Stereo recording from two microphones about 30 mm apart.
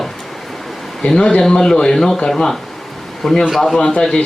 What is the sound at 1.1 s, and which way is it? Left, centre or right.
Speech, left.